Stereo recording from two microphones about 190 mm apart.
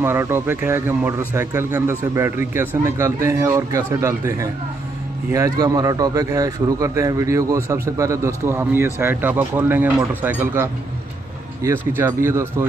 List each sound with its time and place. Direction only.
0.0 s speech: 10° right (ahead or behind)
5.3 s speech: 15° right (ahead or behind)